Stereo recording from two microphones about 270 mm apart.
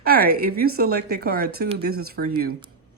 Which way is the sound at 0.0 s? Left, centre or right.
Right.